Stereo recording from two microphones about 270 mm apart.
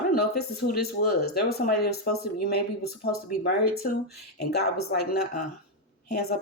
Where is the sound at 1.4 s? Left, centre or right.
Left.